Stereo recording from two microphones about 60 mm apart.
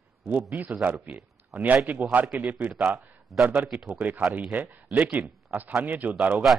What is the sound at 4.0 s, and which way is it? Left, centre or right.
A man's voice, right.